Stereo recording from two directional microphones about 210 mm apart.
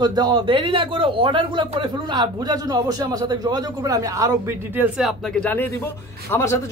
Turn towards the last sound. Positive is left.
turn(degrees=10)  # may be behind; listen again after turning